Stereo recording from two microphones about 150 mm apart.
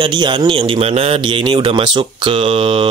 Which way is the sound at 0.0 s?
30° right (ahead or behind).